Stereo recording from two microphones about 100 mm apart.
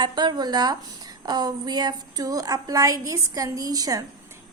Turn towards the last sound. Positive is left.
turn(degrees=-40)  # may be behind; listen again after turning